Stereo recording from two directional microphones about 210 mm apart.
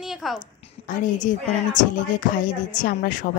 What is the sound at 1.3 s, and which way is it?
Speech, 40° left (ahead or behind).